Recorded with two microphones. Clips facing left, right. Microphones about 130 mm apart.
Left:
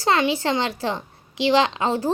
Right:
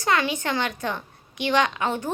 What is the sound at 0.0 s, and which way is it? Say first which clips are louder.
A woman's voice: left 3 dB; 25° left (ahead or behind).